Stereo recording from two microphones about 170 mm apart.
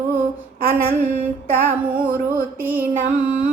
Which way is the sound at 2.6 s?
10° right (ahead or behind).